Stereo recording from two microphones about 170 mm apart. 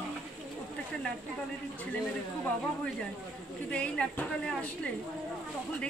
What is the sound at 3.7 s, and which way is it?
A woman's voice, 5° left (ahead or behind).